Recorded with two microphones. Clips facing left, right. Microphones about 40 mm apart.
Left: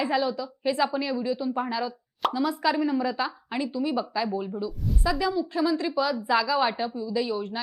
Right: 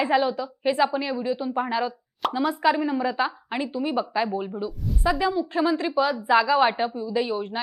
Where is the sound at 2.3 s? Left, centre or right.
Right.